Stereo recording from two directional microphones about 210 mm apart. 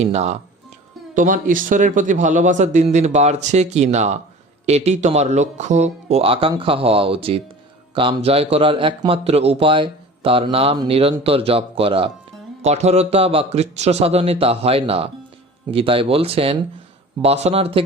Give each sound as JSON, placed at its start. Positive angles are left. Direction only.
{"t": 0.0, "sound": "speech", "side_deg": -30}